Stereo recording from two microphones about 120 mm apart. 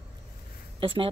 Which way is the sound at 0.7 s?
45° right (ahead or behind).